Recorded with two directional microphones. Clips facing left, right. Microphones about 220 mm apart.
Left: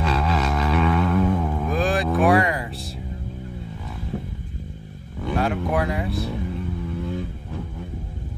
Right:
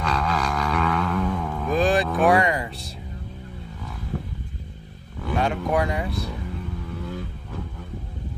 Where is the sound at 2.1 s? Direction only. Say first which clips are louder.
Left 1 dB; centre (ahead or behind).